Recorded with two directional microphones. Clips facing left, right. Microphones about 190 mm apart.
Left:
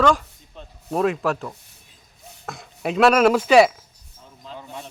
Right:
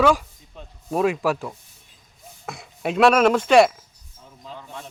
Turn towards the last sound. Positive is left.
turn(degrees=5)  # may be behind; listen again after turning